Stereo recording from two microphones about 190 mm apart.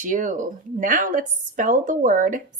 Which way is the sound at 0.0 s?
45° right (ahead or behind).